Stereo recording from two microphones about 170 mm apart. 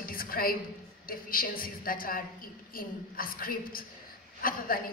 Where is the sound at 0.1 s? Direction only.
60° left (ahead or behind).